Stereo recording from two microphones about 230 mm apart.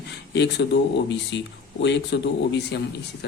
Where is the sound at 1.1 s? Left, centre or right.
Left.